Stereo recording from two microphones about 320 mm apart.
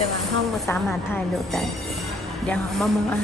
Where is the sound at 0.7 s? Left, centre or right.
Centre.